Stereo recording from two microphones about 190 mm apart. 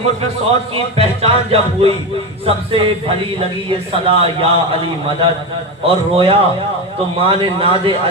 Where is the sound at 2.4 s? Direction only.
30° right (ahead or behind).